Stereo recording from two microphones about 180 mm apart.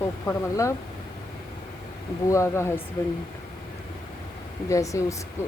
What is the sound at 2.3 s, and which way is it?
Speech, 15° left (ahead or behind).